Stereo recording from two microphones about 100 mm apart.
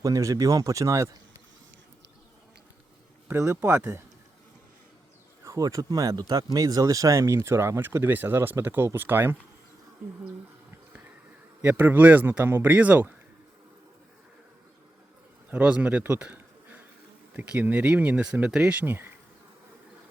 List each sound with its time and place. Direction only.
0.0 s speech: 35° right (ahead or behind)
3.3 s speech: 30° right (ahead or behind)
5.4 s speech: 35° right (ahead or behind)
11.6 s speech: 20° right (ahead or behind)
15.4 s speech: 15° right (ahead or behind)